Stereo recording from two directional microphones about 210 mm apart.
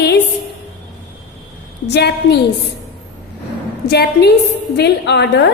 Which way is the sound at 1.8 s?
55° left (ahead or behind).